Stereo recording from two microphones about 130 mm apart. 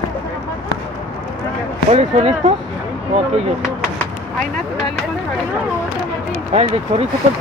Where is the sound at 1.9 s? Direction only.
55° right (ahead or behind).